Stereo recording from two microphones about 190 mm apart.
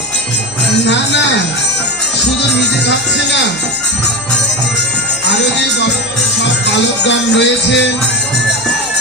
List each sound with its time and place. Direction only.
7.1 s music: 70° left (ahead or behind)